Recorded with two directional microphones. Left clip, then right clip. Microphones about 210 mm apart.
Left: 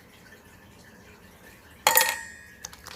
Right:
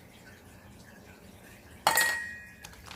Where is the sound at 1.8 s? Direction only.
35° left (ahead or behind).